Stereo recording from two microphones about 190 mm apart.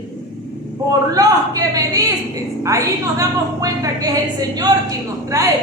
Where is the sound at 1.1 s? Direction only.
20° right (ahead or behind).